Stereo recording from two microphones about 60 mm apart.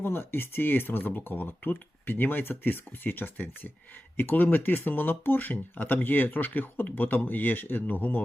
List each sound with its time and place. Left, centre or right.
0.0 s speech: left